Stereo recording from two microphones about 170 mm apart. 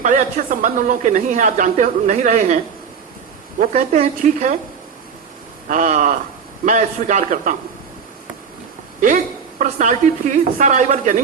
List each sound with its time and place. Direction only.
0.0 s speech: 50° right (ahead or behind)
3.6 s speech: 45° right (ahead or behind)
5.6 s speech: 50° right (ahead or behind)
9.0 s speech: 50° right (ahead or behind)